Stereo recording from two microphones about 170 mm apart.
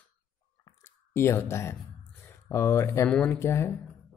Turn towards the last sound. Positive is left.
turn(degrees=15)  # may be behind; listen again after turning